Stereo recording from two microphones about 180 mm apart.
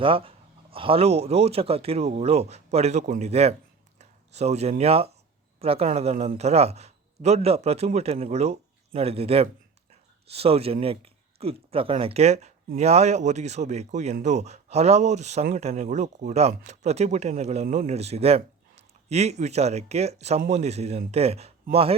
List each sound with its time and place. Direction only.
0.0 s speech: 30° right (ahead or behind)
3.9 s a sound: 35° right (ahead or behind)
4.8 s speech: 35° right (ahead or behind)